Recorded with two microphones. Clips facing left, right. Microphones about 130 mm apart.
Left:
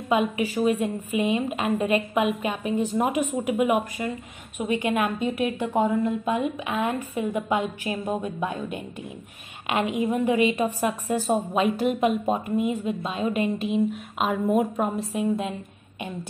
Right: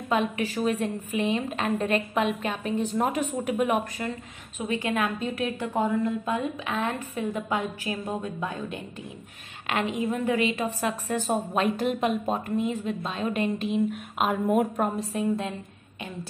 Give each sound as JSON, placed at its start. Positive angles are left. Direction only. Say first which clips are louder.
{"t": 0.1, "sound": "a woman's voice", "louder": "left 3 dB", "side_deg": 5}
{"t": 11.2, "sound": "a woman's voice", "louder": "left 2 dB", "side_deg": 5}